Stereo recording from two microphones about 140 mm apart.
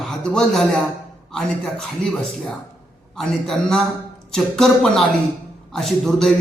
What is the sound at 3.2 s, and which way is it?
A man's voice, centre (ahead or behind).